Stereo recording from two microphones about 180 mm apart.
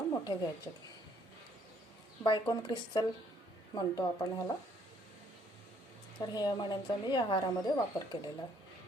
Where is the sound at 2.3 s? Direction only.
25° left (ahead or behind).